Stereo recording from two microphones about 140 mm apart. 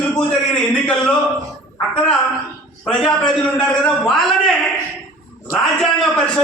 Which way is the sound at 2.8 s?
5° left (ahead or behind).